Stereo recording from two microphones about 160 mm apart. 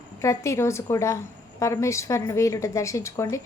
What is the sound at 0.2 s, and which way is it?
A woman's voice, 20° left (ahead or behind).